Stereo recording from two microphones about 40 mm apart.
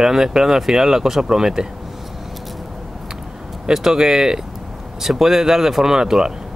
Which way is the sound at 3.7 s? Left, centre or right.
Centre.